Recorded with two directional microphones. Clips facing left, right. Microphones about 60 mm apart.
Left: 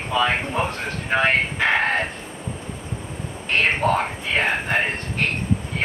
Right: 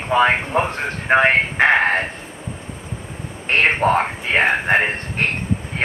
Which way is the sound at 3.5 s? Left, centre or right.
Right.